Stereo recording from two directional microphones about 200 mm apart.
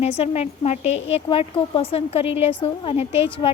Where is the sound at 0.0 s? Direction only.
30° left (ahead or behind).